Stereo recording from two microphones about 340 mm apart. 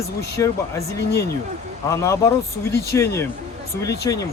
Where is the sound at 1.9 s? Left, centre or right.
Centre.